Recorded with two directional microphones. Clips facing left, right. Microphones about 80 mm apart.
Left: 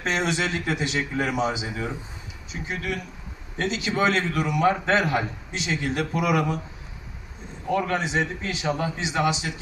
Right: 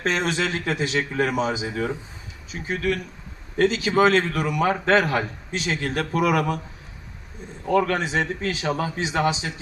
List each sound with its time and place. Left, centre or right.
0.0 s speech: right
7.7 s a man's voice: right